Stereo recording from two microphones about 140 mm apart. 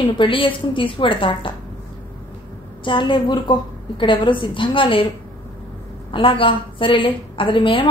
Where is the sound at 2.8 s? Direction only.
35° left (ahead or behind).